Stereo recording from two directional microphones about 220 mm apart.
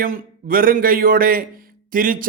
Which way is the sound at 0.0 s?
35° right (ahead or behind).